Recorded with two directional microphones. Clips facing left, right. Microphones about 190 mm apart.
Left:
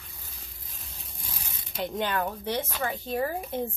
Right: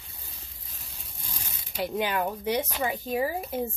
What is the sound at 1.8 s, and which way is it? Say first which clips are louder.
Speech: right 1 dB; 10° right (ahead or behind).